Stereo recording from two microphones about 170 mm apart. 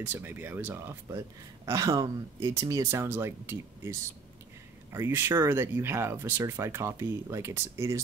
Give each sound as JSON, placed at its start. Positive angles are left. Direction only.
{"t": 0.1, "sound": "speech", "side_deg": -10}